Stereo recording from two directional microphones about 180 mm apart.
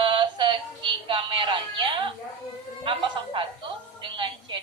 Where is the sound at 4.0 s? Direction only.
30° right (ahead or behind).